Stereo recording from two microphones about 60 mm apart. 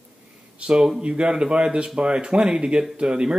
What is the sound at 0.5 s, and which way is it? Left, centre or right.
Speech, centre.